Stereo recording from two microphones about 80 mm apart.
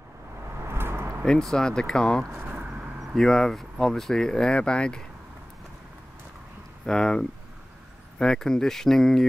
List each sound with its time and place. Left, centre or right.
0.6 s a sound: right
1.2 s speech: centre
2.2 s speech: right
2.5 s vehicle: centre
3.2 s speech: centre
6.9 s speech: centre